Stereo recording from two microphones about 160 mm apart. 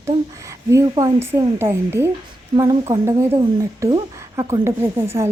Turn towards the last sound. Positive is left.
turn(degrees=-15)  # may be behind; listen again after turning